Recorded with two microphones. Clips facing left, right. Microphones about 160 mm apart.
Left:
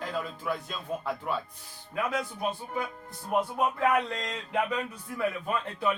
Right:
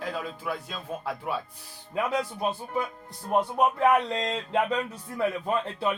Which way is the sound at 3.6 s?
25° right (ahead or behind).